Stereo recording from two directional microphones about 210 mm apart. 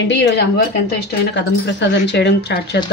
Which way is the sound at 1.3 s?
55° left (ahead or behind).